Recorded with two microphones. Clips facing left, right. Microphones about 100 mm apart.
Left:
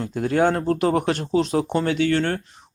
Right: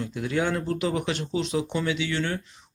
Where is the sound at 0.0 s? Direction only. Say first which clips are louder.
Left 7 dB; 45° left (ahead or behind).